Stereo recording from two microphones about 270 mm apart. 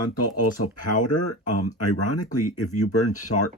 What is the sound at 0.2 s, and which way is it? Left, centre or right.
Speech, left.